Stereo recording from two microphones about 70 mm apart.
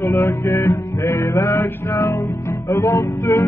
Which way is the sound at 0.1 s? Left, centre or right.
Left.